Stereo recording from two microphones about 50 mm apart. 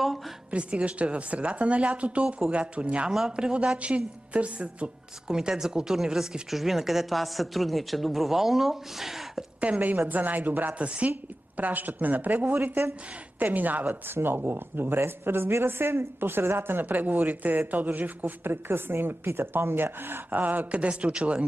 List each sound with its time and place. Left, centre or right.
0.5 s a woman's voice: right
2.2 s a woman's voice: centre
2.5 s a woman's voice: right; by 9.4 s centre
9.6 s a woman's voice: right
14.1 s a woman's voice: right
20.7 s a woman's voice: right